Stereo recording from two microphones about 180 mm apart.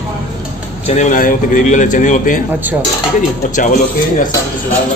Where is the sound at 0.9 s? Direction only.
40° left (ahead or behind).